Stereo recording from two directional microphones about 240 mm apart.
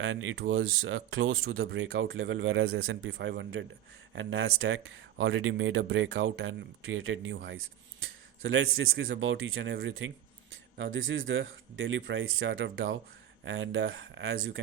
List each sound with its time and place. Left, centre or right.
0.0 s speech: right